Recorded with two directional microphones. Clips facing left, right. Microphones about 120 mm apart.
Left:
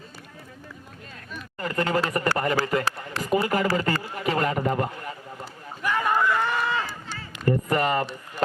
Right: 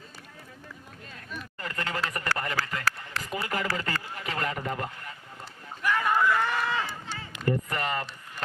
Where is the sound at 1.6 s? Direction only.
40° left (ahead or behind).